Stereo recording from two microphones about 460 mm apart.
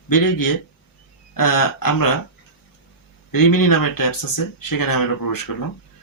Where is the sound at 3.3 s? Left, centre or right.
Left.